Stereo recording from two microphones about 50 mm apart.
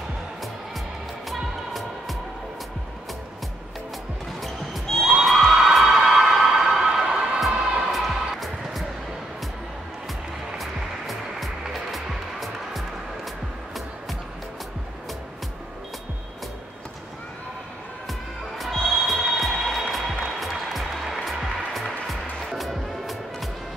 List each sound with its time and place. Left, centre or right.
1.3 s music: centre
4.4 s basketball bounce: centre
5.1 s a sound: centre
7.5 s music: right
7.9 s music: centre
10.6 s music: centre
18.6 s music: centre